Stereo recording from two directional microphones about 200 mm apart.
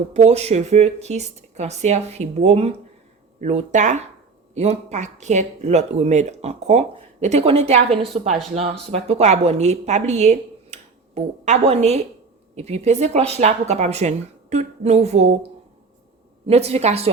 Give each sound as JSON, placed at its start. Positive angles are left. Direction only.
{"t": 0.1, "sound": "a woman's voice", "side_deg": -35}
{"t": 16.5, "sound": "speech", "side_deg": -30}